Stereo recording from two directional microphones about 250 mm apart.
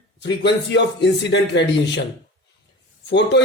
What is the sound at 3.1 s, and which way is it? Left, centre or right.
Speech, left.